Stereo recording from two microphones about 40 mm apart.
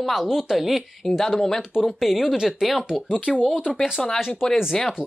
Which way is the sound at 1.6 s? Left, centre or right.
Centre.